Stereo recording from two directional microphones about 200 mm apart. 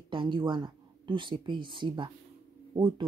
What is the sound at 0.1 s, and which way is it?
Speech, 25° right (ahead or behind).